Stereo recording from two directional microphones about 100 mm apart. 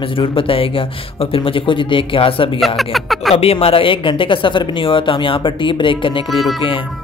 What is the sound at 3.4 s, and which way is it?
Speech, 80° left.